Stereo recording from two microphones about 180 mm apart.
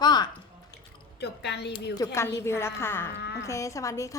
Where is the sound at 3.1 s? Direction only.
70° left (ahead or behind).